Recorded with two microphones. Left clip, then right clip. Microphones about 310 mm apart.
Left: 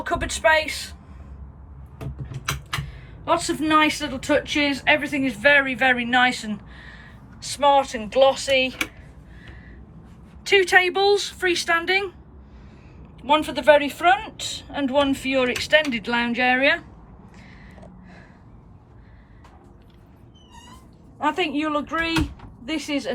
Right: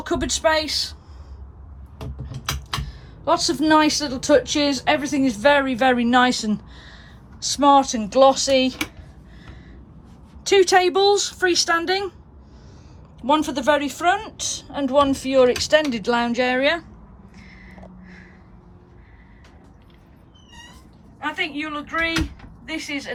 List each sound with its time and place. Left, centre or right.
0.2 s speech: centre
2.8 s speech: centre
10.6 s speech: centre
13.2 s speech: centre
17.3 s a sound: centre
21.2 s speech: centre